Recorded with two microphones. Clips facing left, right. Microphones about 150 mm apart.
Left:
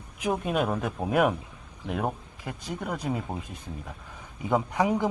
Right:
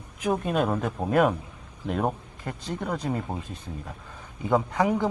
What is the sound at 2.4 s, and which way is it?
Speech, 5° left (ahead or behind).